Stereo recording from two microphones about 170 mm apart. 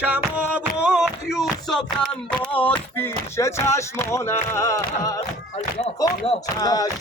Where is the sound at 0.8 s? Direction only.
5° right (ahead or behind); by 5.2 s 20° left (ahead or behind).